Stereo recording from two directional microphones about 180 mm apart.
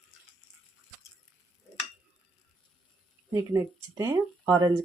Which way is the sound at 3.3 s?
15° right (ahead or behind).